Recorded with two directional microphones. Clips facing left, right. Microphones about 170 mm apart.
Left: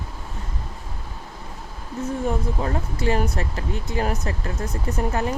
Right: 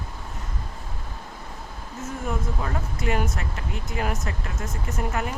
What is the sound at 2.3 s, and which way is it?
Speech, 30° left (ahead or behind).